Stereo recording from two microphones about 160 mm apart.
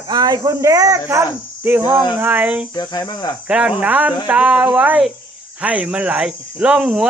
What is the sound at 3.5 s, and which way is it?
Speech, 5° right (ahead or behind).